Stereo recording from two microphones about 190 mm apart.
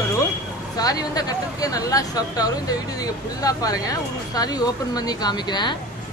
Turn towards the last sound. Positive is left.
turn(degrees=25)  # may be behind; listen again after turning